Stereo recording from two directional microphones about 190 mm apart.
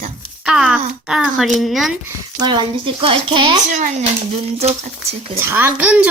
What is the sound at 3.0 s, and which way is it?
Speech, 25° right (ahead or behind).